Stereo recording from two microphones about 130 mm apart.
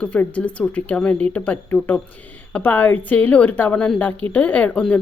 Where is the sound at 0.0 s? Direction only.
10° left (ahead or behind).